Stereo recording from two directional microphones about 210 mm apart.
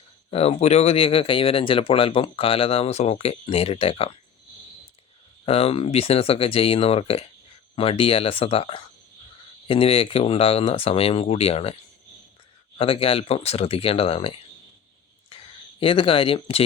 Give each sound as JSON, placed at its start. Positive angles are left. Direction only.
{"t": 0.3, "sound": "speech", "side_deg": 30}
{"t": 5.5, "sound": "speech", "side_deg": 30}
{"t": 12.8, "sound": "speech", "side_deg": 25}
{"t": 15.3, "sound": "a sound", "side_deg": 25}
{"t": 15.8, "sound": "speech", "side_deg": 25}